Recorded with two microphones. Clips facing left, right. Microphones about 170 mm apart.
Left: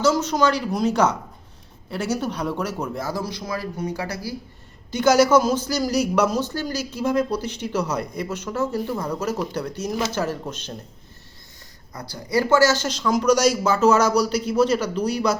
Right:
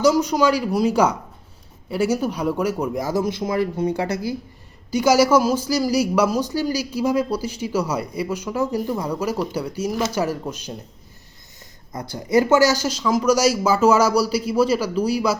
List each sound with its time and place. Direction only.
0.0 s speech: 15° right (ahead or behind)
4.9 s speech: 10° right (ahead or behind)
11.9 s speech: 20° right (ahead or behind)